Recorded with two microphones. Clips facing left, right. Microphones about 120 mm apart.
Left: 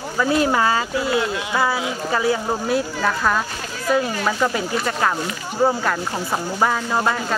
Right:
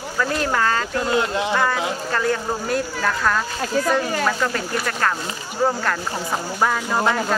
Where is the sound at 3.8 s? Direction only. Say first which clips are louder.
Right 8 dB; 45° right (ahead or behind).